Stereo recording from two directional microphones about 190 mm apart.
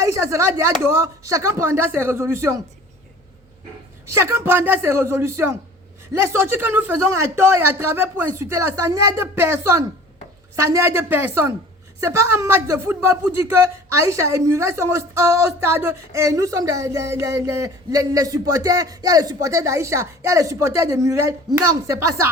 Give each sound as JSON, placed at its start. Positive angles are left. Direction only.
{"t": 0.0, "sound": "speech", "side_deg": -15}
{"t": 4.0, "sound": "speech", "side_deg": -15}